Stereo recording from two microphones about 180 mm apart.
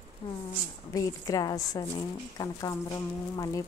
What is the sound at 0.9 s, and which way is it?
A woman's voice, 20° left (ahead or behind).